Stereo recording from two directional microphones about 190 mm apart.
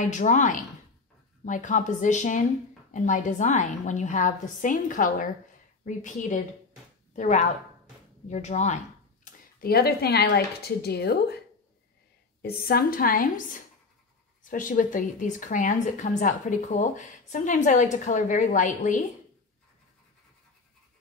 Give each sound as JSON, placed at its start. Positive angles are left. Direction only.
{"t": 0.0, "sound": "a woman's voice", "side_deg": 40}
{"t": 12.4, "sound": "a woman's voice", "side_deg": 55}